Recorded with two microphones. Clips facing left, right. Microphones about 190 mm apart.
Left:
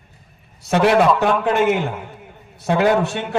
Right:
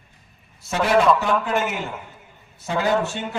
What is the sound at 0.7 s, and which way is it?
Speech, 65° left (ahead or behind).